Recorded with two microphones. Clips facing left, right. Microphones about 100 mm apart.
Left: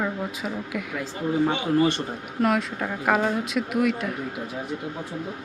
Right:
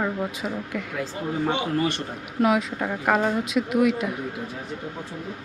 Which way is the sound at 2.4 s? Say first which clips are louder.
Right 1 dB; 5° right (ahead or behind).